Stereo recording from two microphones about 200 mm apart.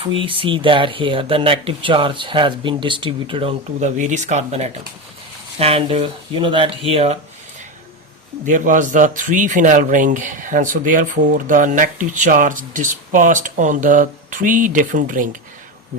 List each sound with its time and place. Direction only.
0.0 s speech: 25° right (ahead or behind)
8.4 s a man's voice: 40° right (ahead or behind)